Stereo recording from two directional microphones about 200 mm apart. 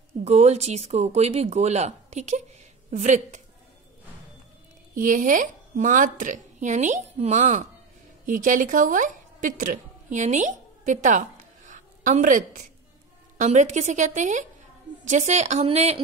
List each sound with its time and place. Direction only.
0.2 s a woman's voice: 35° right (ahead or behind)
4.9 s a woman's voice: 40° right (ahead or behind)